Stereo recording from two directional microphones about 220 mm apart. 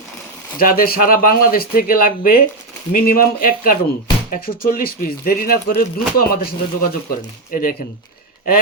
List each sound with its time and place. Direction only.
0.6 s speech: 40° left (ahead or behind)